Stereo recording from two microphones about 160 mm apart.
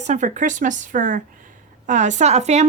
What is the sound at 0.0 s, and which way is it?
Speech, 50° right (ahead or behind).